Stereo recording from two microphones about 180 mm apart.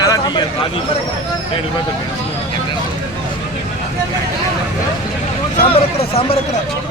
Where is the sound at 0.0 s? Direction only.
20° left (ahead or behind).